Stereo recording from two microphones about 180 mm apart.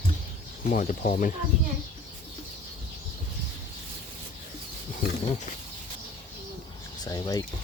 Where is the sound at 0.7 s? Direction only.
45° left (ahead or behind).